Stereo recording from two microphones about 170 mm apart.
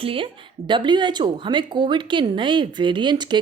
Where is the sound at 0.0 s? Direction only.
30° right (ahead or behind).